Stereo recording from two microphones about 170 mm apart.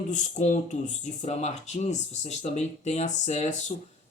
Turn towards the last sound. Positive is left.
turn(degrees=45)  # may be behind; listen again after turning